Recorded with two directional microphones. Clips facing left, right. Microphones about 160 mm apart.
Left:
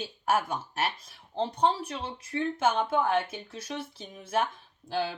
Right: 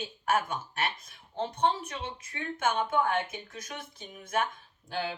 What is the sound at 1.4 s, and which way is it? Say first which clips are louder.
Speech: left 2 dB; 35° left (ahead or behind).